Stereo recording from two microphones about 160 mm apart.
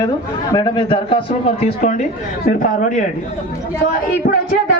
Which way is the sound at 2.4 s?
55° left (ahead or behind).